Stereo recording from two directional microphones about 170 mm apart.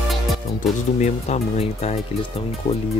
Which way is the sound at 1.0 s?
40° left (ahead or behind).